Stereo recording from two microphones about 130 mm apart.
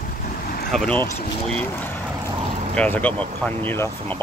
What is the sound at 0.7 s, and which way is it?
Speech, 5° left (ahead or behind).